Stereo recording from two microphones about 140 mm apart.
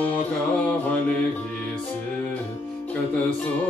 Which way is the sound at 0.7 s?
10° left (ahead or behind).